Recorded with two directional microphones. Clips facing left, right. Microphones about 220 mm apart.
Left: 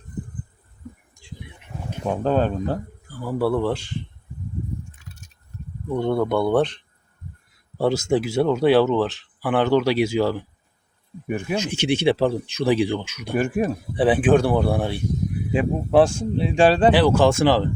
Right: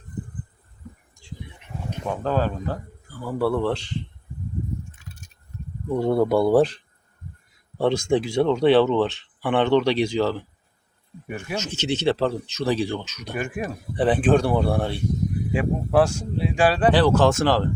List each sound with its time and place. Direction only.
2.0 s speech: 20° left (ahead or behind)
3.2 s speech: 10° left (ahead or behind)
5.9 s speech: 5° right (ahead or behind)
15.5 s speech: 25° left (ahead or behind)
16.9 s speech: 10° left (ahead or behind)